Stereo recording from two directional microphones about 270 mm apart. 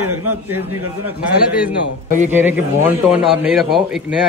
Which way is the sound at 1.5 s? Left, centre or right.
Centre.